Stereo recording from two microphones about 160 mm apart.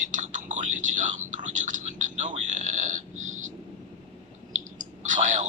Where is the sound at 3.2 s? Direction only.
50° right (ahead or behind).